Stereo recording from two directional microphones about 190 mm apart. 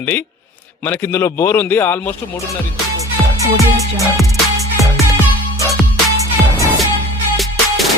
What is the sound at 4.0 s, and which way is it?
Music, centre (ahead or behind).